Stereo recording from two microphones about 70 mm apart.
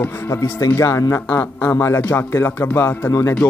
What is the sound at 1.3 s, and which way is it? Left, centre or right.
Speech, left.